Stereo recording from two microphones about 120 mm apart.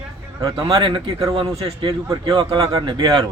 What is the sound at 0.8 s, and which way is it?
A man's voice, 45° right (ahead or behind).